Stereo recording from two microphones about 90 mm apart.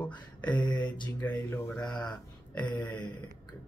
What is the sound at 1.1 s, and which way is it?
Speech, 25° left (ahead or behind).